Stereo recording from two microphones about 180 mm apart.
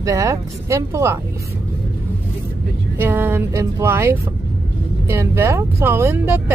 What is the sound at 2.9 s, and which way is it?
Speech, 10° right (ahead or behind).